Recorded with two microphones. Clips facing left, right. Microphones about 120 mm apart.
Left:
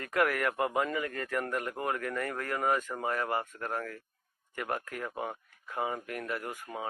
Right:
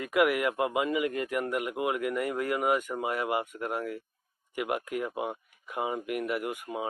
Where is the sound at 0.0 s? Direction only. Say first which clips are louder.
Right 4 dB; 10° right (ahead or behind).